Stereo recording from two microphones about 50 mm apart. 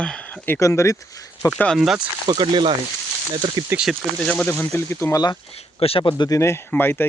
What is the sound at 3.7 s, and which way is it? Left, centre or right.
Speech, right.